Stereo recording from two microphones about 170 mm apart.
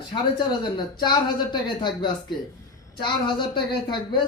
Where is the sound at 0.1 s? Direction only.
25° left (ahead or behind).